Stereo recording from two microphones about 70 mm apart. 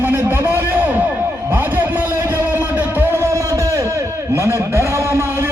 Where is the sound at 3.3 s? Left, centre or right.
Right.